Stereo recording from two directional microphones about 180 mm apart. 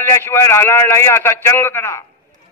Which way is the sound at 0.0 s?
15° left (ahead or behind).